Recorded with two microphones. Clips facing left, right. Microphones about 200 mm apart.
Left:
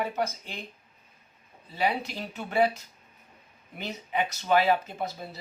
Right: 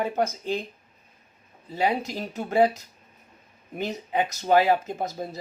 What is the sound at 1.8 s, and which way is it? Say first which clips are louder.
Speech: right 3 dB; 45° right (ahead or behind).